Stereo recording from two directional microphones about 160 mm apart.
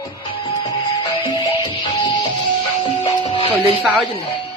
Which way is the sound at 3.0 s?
35° left (ahead or behind).